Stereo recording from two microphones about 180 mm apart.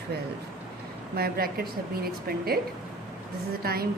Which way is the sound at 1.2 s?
60° right (ahead or behind).